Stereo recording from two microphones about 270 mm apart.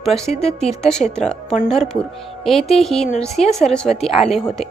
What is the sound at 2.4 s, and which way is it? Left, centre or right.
Music, centre.